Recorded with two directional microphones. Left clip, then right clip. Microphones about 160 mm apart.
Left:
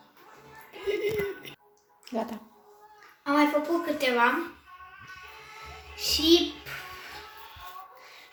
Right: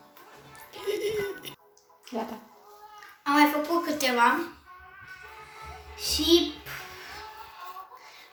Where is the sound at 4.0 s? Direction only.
10° left (ahead or behind).